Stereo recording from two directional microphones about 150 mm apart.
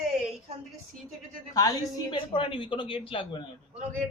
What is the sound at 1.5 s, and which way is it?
Speech, 25° left (ahead or behind).